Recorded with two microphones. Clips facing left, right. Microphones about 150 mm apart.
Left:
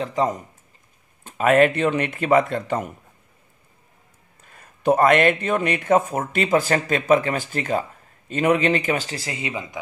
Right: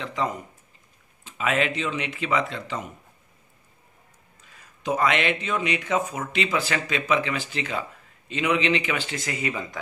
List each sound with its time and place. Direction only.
0.0 s speech: 40° left (ahead or behind)
1.2 s speech: 50° left (ahead or behind)
4.4 s speech: 55° left (ahead or behind); by 9.7 s 20° left (ahead or behind)